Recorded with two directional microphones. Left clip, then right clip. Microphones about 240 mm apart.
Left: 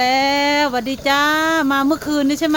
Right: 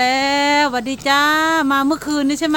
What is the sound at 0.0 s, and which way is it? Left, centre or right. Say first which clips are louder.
Speech: even; centre.